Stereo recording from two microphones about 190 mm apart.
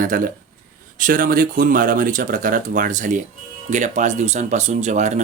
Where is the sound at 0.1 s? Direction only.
50° right (ahead or behind).